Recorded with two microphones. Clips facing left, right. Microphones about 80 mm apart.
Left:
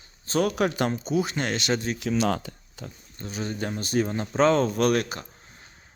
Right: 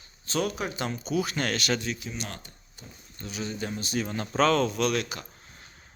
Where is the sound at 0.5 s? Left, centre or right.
Left.